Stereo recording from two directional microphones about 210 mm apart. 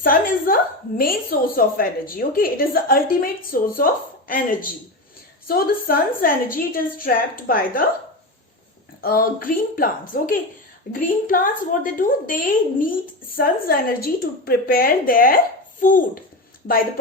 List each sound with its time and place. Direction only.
0.0 s a woman's voice: 40° left (ahead or behind)
9.0 s a woman's voice: 45° left (ahead or behind)